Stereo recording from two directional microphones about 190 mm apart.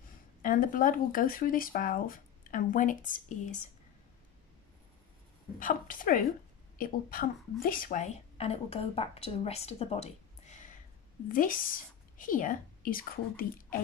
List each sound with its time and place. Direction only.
0.4 s speech: 45° left (ahead or behind)
5.6 s a woman's voice: 45° left (ahead or behind)